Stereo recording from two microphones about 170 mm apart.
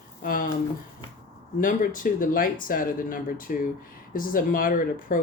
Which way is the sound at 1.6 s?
50° left (ahead or behind).